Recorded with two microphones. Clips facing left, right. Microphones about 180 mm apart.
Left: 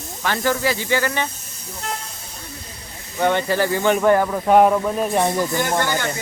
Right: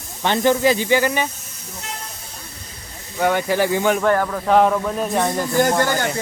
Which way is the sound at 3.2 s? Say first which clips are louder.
Right 1 dB; 5° right (ahead or behind).